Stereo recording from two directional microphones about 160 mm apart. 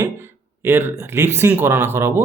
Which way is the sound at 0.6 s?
15° right (ahead or behind).